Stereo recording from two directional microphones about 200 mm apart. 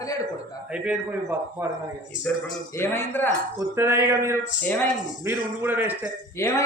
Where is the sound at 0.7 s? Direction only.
5° right (ahead or behind).